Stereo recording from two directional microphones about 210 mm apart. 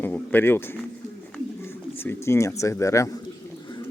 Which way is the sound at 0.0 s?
10° left (ahead or behind).